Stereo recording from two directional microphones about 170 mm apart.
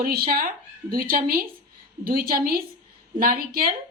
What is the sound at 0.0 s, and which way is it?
Speech, 60° right (ahead or behind).